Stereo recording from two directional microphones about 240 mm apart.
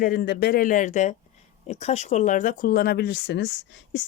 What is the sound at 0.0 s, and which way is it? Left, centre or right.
A woman's voice, left.